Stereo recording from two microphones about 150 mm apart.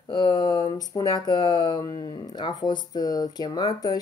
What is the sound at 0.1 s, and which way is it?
Speech, 25° left (ahead or behind).